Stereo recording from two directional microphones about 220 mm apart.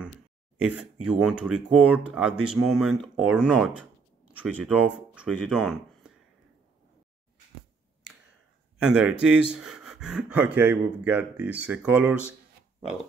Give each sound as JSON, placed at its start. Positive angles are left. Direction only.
{"t": 0.6, "sound": "speech", "side_deg": -5}
{"t": 8.8, "sound": "speech", "side_deg": -5}